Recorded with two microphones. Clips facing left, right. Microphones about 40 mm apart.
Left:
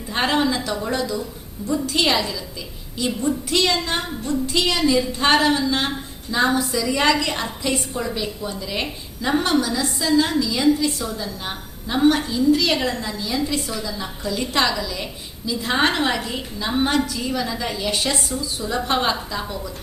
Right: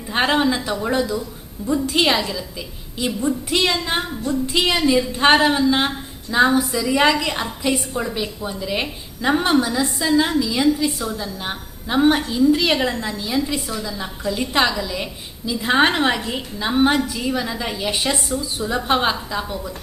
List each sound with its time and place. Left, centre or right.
0.1 s a woman's voice: centre